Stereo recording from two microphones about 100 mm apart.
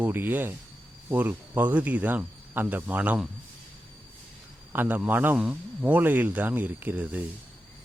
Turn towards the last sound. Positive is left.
turn(degrees=-15)  # may be behind; listen again after turning